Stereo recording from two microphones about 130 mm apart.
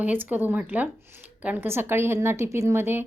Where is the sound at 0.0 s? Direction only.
15° right (ahead or behind).